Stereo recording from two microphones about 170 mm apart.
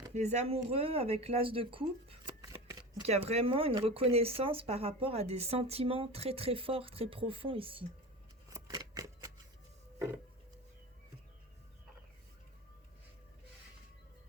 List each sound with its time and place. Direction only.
0.1 s speech: 40° right (ahead or behind)
2.4 s shuffling cards: 20° right (ahead or behind)
3.0 s speech: 35° right (ahead or behind)
8.4 s scissors: 20° right (ahead or behind)